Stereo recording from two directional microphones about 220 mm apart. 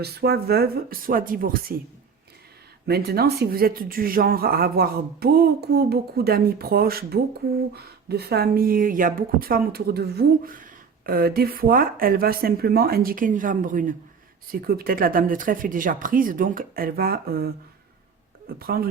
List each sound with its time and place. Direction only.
0.0 s speech: 45° right (ahead or behind)
2.8 s speech: 45° right (ahead or behind)